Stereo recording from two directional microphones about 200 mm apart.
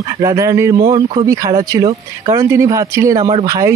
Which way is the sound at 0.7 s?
30° right (ahead or behind).